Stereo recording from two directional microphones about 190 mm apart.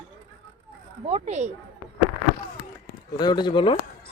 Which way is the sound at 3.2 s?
20° left (ahead or behind).